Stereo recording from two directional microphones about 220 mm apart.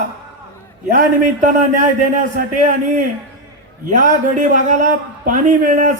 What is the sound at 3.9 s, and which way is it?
A man's voice, 35° right (ahead or behind).